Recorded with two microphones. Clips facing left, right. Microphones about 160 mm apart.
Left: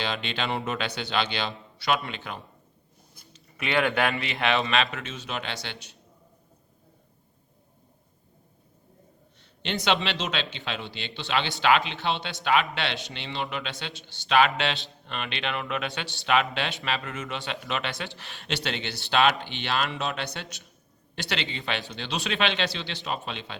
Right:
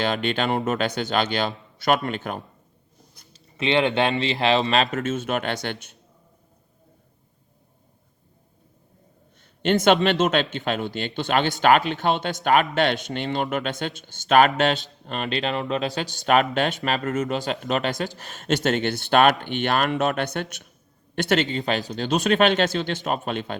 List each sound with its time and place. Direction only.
0.0 s speech: 50° right (ahead or behind)
3.3 s speech: 25° right (ahead or behind); by 6.0 s 55° right (ahead or behind)
9.6 s speech: 50° right (ahead or behind)